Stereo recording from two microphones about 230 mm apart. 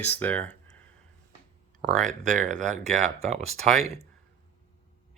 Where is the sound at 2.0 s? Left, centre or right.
Right.